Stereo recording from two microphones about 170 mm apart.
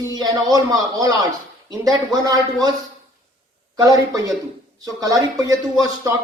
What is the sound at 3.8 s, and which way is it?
Speech, 20° right (ahead or behind).